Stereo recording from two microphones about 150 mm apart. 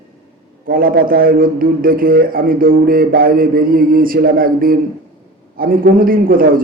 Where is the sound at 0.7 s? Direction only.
70° right (ahead or behind).